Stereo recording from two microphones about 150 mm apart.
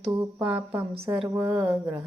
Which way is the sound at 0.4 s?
15° right (ahead or behind).